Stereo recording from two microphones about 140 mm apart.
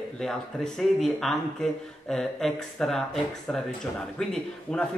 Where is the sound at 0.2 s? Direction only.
5° left (ahead or behind).